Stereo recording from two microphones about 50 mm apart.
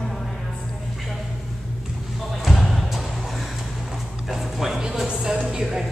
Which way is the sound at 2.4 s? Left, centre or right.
Centre.